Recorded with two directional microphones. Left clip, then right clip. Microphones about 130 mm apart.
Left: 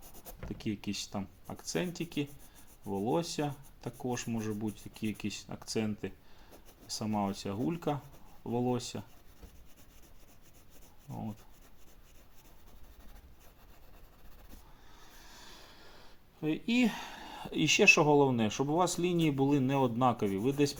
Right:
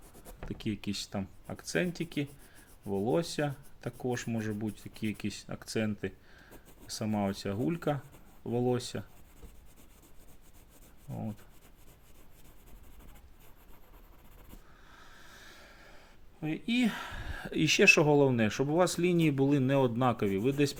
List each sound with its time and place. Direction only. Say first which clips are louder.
0.4 s speech: right 1 dB; 45° right (ahead or behind)
11.1 s speech: right 1 dB; 40° right (ahead or behind)
14.9 s a sound: right 2 dB; 40° right (ahead or behind); by 16.7 s 25° right (ahead or behind)
16.7 s speech: right 2 dB; 40° right (ahead or behind)